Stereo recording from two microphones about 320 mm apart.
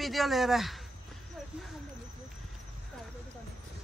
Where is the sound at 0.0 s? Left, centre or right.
Centre.